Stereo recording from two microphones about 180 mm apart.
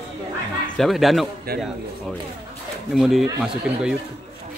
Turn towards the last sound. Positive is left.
turn(degrees=0)  # may be behind; listen again after turning